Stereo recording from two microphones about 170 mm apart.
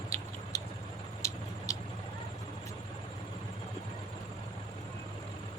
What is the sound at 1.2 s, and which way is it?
Vehicle, 15° left (ahead or behind).